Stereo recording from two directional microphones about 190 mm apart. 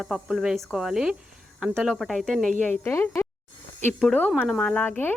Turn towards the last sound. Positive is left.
turn(degrees=10)  # may be behind; listen again after turning